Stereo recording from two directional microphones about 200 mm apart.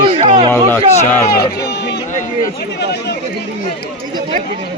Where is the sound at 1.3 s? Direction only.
55° left (ahead or behind).